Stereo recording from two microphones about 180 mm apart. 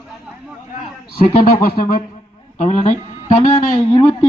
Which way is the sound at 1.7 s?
55° left (ahead or behind).